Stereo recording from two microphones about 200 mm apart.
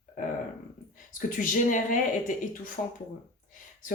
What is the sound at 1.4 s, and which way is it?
Speech, 40° left (ahead or behind).